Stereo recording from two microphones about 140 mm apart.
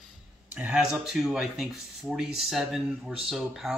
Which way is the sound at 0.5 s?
10° right (ahead or behind).